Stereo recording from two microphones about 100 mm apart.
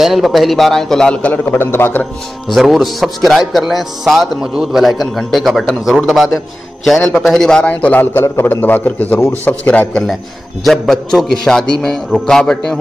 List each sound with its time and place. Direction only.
0.0 s a man's voice: centre (ahead or behind); by 2.0 s 25° left (ahead or behind)
2.4 s a man's voice: centre (ahead or behind)
10.6 s a man's voice: centre (ahead or behind)